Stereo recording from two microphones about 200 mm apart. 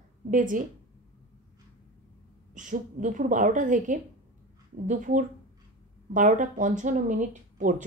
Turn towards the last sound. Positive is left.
turn(degrees=-40)  # may be behind; listen again after turning